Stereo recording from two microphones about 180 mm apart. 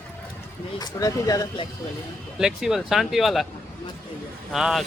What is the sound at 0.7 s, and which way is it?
Speech, 20° left (ahead or behind).